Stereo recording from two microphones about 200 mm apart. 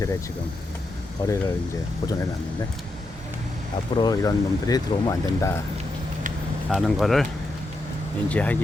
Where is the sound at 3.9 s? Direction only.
20° left (ahead or behind).